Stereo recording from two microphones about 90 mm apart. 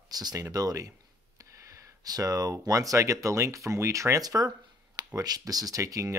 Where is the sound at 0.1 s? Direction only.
45° right (ahead or behind).